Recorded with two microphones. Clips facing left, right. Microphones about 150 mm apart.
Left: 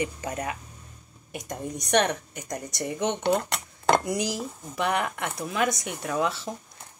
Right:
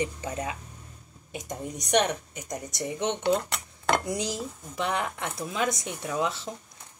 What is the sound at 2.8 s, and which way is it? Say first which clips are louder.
Speech: left 1 dB; 10° left (ahead or behind).